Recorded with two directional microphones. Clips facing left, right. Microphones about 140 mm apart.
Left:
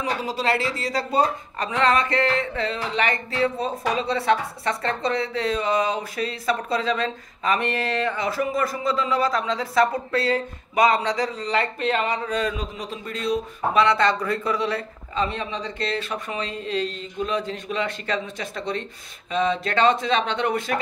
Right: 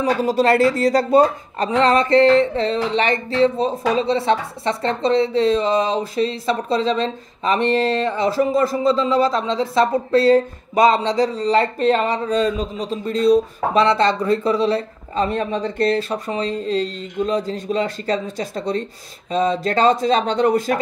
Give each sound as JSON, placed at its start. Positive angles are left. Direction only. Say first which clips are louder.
{"t": 0.0, "sound": "speech", "louder": "right 8 dB", "side_deg": -45}
{"t": 1.7, "sound": "music", "louder": "right 6 dB", "side_deg": -30}
{"t": 15.2, "sound": "speech", "louder": "right 7 dB", "side_deg": -50}